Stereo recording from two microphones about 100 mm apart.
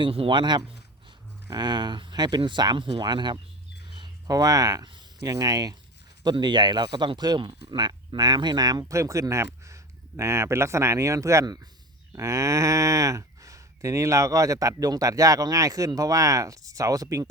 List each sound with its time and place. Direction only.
0.0 s speech: 60° right (ahead or behind); by 5.7 s 40° right (ahead or behind)
6.3 s speech: 50° right (ahead or behind)
8.8 s speech: 30° right (ahead or behind)
12.1 s speech: 30° right (ahead or behind)